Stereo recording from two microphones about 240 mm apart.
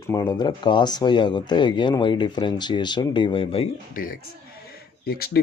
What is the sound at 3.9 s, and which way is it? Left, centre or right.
Speech, left.